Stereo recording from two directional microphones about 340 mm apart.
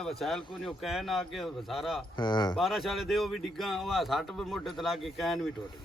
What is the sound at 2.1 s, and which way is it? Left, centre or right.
Speech, centre.